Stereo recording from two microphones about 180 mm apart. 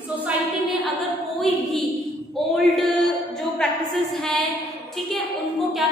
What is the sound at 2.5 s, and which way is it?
Male singing, centre (ahead or behind).